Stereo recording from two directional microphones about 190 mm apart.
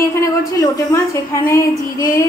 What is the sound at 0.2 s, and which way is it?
A woman's voice, 15° left (ahead or behind).